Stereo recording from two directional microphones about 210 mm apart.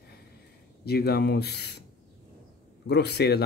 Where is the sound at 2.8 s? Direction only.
50° left (ahead or behind).